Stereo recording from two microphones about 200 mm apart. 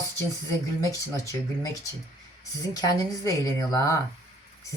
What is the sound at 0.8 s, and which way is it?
Speech, 15° left (ahead or behind).